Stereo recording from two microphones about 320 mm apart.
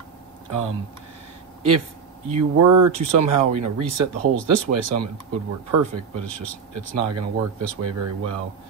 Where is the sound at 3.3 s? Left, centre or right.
Right.